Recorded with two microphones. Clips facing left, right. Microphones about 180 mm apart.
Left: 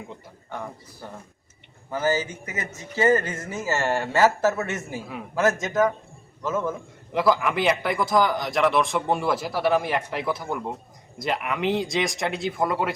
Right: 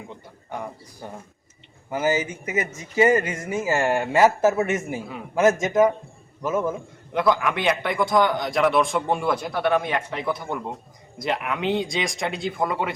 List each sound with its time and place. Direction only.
0.5 s a man's voice: 15° right (ahead or behind)
7.1 s a man's voice: centre (ahead or behind)